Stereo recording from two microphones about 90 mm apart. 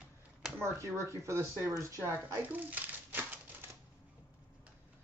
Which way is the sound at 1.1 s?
35° right (ahead or behind).